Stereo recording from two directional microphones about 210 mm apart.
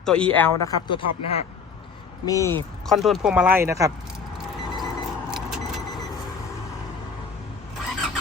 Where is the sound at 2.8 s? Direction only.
Centre (ahead or behind).